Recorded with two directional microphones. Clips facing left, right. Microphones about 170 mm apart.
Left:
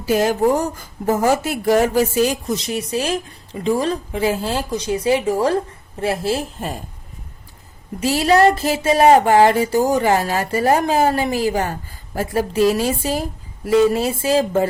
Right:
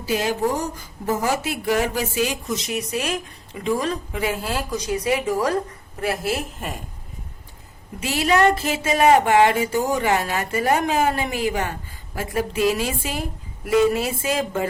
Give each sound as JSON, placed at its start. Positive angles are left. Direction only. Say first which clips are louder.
{"t": 0.1, "sound": "speech", "louder": "left 6 dB", "side_deg": 50}
{"t": 8.0, "sound": "speech", "louder": "left 4 dB", "side_deg": 35}